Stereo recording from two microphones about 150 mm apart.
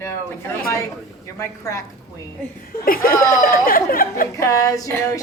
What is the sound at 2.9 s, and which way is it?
Speech, 70° left (ahead or behind).